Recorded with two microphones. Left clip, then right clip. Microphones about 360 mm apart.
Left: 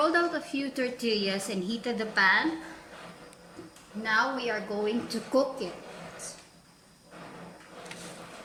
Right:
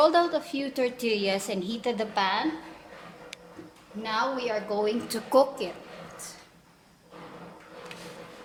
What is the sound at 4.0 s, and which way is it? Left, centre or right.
A woman's voice, centre.